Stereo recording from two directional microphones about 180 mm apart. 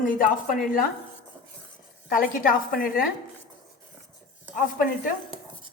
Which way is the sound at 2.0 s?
50° left (ahead or behind).